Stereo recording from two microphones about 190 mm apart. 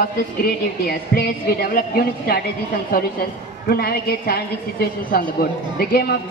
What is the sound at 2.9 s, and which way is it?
A woman's voice, 55° left (ahead or behind).